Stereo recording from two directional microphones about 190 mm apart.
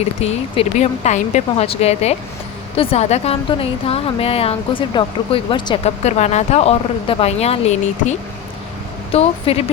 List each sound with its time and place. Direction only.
0.0 s a woman's voice: 35° left (ahead or behind)
9.1 s a woman's voice: 30° left (ahead or behind)